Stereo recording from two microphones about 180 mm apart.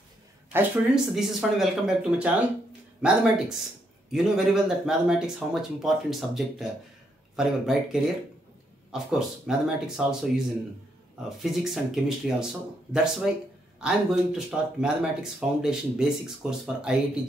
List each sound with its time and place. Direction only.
0.5 s speech: 10° right (ahead or behind)
1.1 s speech: centre (ahead or behind)